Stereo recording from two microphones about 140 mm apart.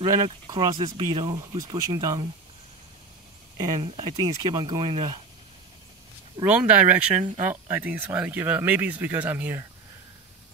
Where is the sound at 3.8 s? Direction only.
40° right (ahead or behind).